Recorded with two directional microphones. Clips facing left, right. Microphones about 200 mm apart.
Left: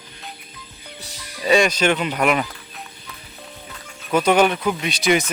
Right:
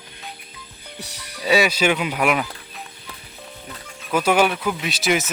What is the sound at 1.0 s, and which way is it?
Music, 65° right (ahead or behind).